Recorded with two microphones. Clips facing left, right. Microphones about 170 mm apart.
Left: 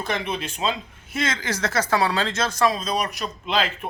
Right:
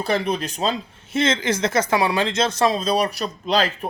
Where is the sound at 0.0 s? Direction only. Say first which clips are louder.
Right 5 dB; 35° right (ahead or behind).